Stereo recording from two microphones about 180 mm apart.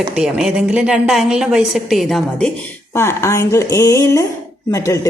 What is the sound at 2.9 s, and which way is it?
A woman's voice, 15° left (ahead or behind).